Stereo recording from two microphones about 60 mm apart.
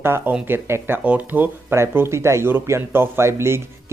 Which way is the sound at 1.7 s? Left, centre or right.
Right.